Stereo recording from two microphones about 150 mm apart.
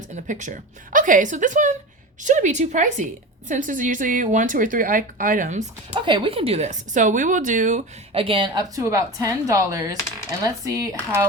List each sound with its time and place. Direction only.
0.3 s a woman's voice: 55° right (ahead or behind)
5.9 s a woman's voice: 35° right (ahead or behind); by 7.9 s 55° right (ahead or behind)
8.1 s a woman's voice: 35° right (ahead or behind); by 10.9 s 20° right (ahead or behind)